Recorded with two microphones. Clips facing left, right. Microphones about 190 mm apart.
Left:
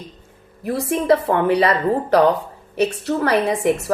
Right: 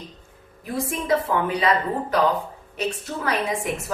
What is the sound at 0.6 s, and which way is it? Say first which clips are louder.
A woman's voice: left 6 dB; 70° left (ahead or behind).